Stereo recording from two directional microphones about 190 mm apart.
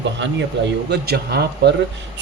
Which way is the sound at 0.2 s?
75° right (ahead or behind).